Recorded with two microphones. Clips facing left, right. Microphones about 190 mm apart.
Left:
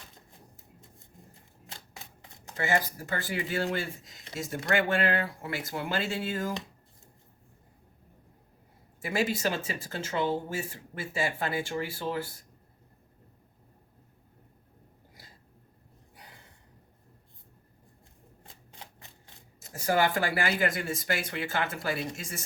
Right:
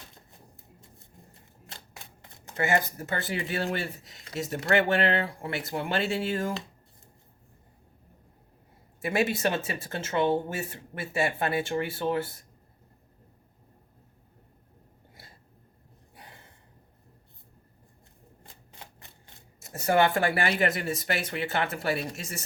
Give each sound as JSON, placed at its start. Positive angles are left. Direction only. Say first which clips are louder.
{"t": 2.6, "sound": "speech", "louder": "right 2 dB", "side_deg": -25}
{"t": 9.0, "sound": "speech", "louder": "right 3 dB", "side_deg": -25}
{"t": 19.7, "sound": "speech", "louder": "right 3 dB", "side_deg": -25}